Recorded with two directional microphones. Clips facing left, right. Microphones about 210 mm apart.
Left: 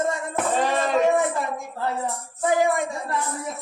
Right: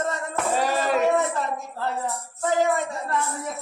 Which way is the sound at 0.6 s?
5° right (ahead or behind).